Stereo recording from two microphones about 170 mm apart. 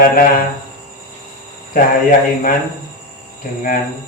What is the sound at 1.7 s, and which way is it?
Speech, 55° left (ahead or behind).